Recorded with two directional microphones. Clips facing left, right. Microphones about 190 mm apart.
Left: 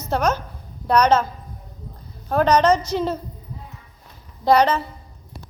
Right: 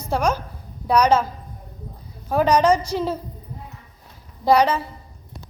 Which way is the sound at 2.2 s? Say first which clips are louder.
Even; 10° right (ahead or behind).